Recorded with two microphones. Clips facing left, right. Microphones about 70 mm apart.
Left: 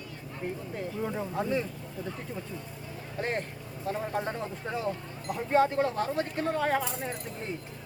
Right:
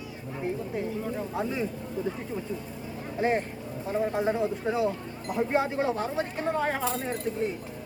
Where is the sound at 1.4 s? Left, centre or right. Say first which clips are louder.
Left 2 dB; centre.